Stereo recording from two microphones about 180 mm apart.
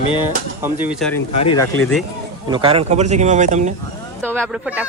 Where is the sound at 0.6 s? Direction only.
10° right (ahead or behind).